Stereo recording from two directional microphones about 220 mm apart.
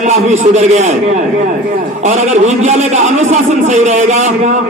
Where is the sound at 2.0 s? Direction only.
30° right (ahead or behind).